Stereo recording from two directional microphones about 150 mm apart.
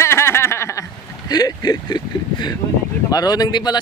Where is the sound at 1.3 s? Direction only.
25° left (ahead or behind).